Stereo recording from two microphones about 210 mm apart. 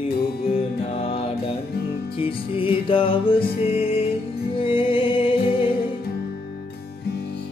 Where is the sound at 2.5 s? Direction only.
25° left (ahead or behind).